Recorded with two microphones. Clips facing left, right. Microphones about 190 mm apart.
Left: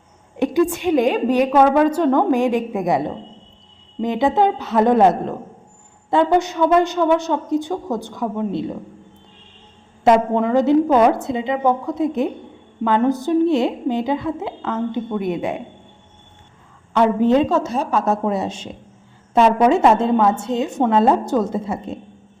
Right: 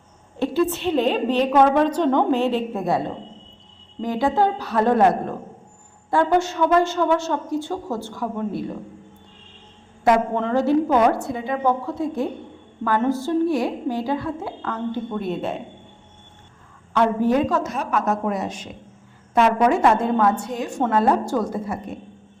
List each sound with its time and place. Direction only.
0.3 s a woman's voice: 15° left (ahead or behind)
10.0 s a woman's voice: 20° left (ahead or behind)
16.9 s a woman's voice: 20° left (ahead or behind)